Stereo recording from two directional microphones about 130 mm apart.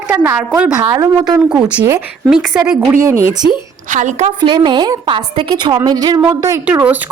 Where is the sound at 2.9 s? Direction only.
20° right (ahead or behind).